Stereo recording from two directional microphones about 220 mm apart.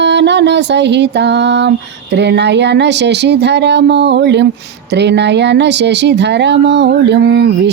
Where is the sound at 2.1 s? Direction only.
50° right (ahead or behind).